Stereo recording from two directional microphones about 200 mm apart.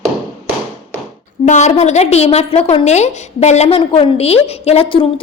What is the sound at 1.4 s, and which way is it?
A woman's voice, 35° left (ahead or behind).